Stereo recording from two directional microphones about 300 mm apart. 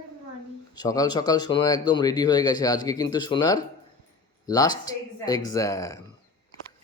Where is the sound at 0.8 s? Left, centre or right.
Centre.